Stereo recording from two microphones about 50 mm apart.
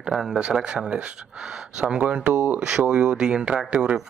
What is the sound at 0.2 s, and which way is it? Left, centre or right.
Speech, centre.